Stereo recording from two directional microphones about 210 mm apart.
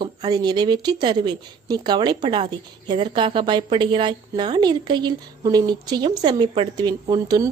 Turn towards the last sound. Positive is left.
turn(degrees=-20)  # may be behind; listen again after turning